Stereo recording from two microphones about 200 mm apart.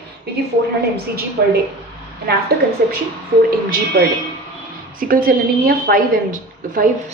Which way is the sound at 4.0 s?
45° right (ahead or behind).